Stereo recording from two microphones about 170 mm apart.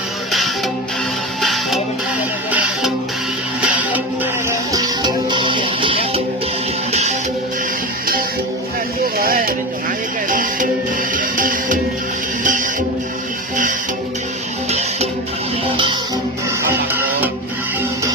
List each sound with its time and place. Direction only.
0.3 s music: centre (ahead or behind)
3.6 s music: 10° right (ahead or behind)
4.4 s music: 20° right (ahead or behind); by 7.2 s 40° right (ahead or behind)
9.1 s a sound: 60° right (ahead or behind)
10.2 s music: 50° right (ahead or behind)
16.9 s music: 10° right (ahead or behind)